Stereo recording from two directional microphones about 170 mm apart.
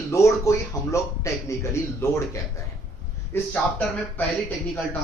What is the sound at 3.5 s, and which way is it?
A man's voice, 10° left (ahead or behind).